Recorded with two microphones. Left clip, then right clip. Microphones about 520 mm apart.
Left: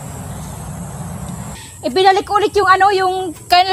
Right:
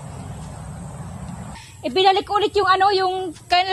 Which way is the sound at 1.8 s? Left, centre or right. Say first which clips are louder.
Left 5 dB; right.